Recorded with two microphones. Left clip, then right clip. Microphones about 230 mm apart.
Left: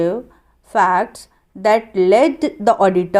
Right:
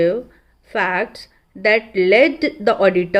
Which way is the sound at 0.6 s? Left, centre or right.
Left.